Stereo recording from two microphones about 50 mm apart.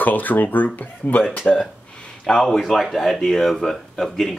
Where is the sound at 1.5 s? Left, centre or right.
Centre.